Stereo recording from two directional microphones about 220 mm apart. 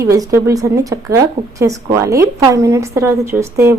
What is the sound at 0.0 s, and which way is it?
A woman's voice, 15° right (ahead or behind).